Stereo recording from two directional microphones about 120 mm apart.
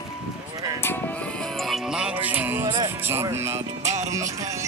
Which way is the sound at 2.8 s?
20° right (ahead or behind).